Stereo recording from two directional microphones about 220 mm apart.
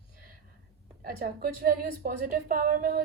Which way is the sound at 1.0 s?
40° right (ahead or behind).